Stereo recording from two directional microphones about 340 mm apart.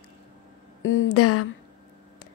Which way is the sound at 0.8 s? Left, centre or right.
Left.